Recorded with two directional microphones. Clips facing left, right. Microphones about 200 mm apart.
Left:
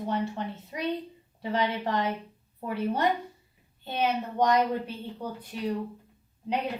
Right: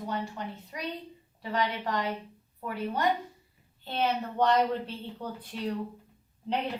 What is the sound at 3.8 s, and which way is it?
A woman's voice, 15° left (ahead or behind).